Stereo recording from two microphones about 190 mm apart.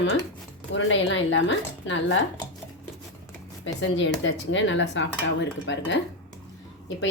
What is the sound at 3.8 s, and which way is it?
Speech, 75° left (ahead or behind).